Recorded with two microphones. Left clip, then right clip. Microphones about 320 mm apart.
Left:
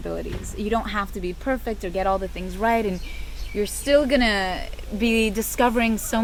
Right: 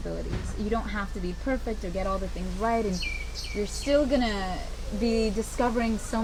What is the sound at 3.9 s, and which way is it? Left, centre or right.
Speech, left.